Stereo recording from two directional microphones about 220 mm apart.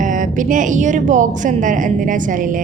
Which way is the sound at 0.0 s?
35° right (ahead or behind).